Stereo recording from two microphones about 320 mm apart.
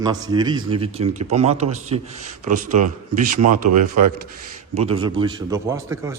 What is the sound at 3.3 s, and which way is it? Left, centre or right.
Speech, right.